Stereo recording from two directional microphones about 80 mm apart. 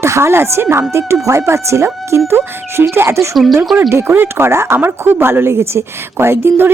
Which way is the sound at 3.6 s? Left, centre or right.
Centre.